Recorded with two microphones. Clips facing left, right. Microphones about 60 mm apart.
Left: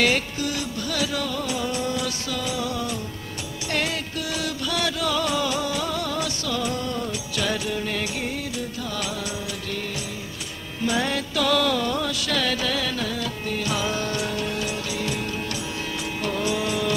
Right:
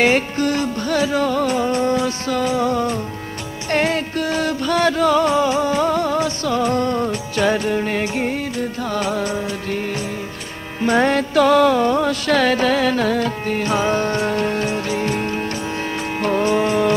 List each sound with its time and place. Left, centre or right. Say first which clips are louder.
0.4 s music: right 8 dB; right